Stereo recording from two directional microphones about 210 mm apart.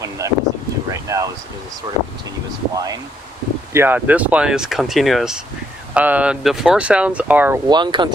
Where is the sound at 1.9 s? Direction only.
25° right (ahead or behind).